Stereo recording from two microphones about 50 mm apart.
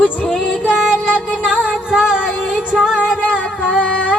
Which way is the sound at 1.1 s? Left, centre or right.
Centre.